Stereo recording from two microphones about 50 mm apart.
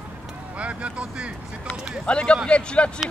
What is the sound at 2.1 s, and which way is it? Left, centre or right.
Speech, left.